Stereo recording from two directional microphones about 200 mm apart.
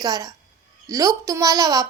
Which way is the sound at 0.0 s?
20° right (ahead or behind).